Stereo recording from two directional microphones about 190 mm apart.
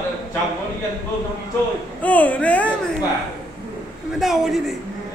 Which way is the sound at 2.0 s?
10° left (ahead or behind).